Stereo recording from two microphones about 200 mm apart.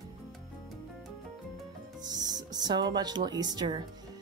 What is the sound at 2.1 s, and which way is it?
Speech, 20° right (ahead or behind).